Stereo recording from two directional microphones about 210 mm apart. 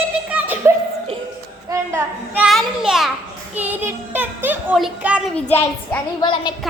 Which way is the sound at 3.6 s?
10° right (ahead or behind).